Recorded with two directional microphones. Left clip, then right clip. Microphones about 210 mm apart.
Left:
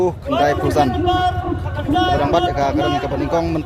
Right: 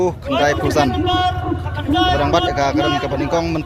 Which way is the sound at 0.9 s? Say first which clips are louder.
Even; 55° left (ahead or behind).